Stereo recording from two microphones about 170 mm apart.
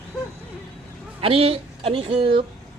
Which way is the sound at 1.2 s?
35° right (ahead or behind).